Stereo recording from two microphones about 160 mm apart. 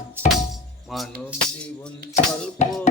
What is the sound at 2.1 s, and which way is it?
Music, 50° left (ahead or behind).